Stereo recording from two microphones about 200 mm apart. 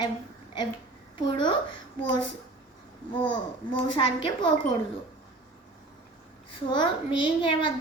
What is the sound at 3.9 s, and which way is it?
Speech, 25° left (ahead or behind).